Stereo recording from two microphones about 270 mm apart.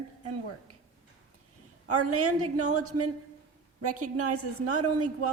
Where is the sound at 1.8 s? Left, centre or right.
Right.